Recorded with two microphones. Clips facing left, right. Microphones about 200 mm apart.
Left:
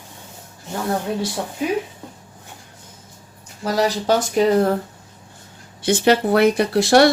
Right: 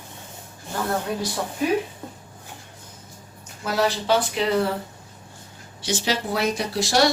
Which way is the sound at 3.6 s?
40° left (ahead or behind).